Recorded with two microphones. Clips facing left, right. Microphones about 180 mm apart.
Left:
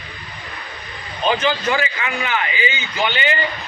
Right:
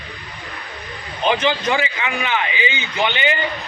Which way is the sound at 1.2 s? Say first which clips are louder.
Even; 15° right (ahead or behind).